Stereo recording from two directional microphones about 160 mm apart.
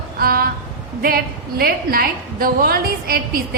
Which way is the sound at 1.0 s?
70° right (ahead or behind).